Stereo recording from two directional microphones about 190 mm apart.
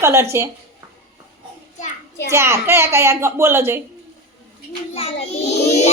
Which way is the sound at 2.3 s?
15° right (ahead or behind).